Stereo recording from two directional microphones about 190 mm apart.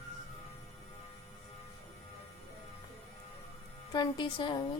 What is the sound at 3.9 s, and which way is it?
Speech, 25° left (ahead or behind).